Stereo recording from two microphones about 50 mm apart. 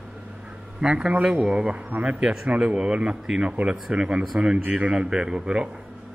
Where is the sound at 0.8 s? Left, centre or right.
Right.